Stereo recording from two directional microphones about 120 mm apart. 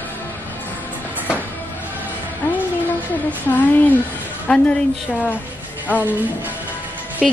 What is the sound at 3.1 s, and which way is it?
A woman's voice, 15° left (ahead or behind).